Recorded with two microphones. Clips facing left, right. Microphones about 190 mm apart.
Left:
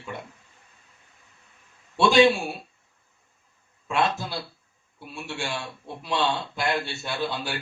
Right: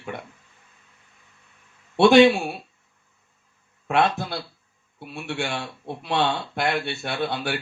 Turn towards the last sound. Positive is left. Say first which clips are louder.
# right 3 dB
turn(degrees=-60)  # may be behind; listen again after turning